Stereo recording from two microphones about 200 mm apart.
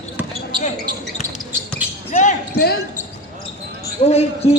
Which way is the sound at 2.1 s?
40° left (ahead or behind).